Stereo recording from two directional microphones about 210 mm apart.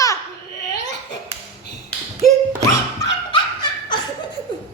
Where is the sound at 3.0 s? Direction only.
20° left (ahead or behind).